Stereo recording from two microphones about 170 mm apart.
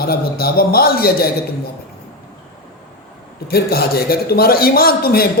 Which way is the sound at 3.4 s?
65° left (ahead or behind).